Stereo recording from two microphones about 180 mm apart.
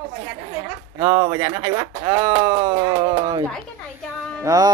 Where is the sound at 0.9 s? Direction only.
20° right (ahead or behind).